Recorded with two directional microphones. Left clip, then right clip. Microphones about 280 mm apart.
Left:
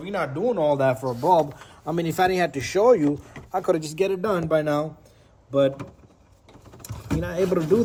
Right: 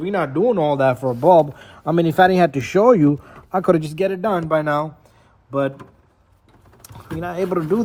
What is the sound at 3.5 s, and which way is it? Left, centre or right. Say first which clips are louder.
Speech: right 6 dB; right.